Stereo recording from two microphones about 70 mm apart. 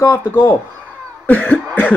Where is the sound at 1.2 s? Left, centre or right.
Left.